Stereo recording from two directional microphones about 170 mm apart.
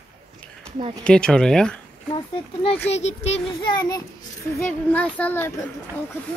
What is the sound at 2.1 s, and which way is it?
A child's voice, 30° left (ahead or behind).